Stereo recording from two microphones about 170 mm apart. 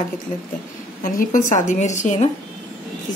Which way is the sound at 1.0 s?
50° left (ahead or behind).